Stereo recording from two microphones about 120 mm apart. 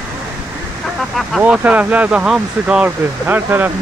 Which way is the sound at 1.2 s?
5° right (ahead or behind).